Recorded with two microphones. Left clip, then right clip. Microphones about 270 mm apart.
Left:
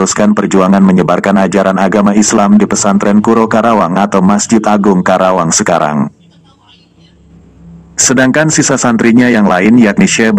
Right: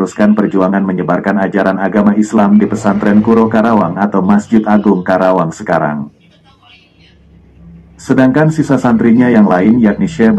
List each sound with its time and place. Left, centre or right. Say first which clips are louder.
0.0 s speech: left 2 dB; left
7.9 s speech: left 2 dB; left